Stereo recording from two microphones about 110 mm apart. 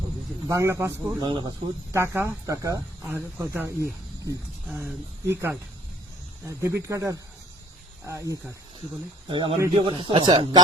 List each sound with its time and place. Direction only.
0.4 s speech: 30° right (ahead or behind)
1.2 s speech: 45° right (ahead or behind)
1.9 s speech: 25° right (ahead or behind)
3.1 s speech: 20° right (ahead or behind)
5.3 s speech: 25° right (ahead or behind)
9.3 s speech: 50° right (ahead or behind)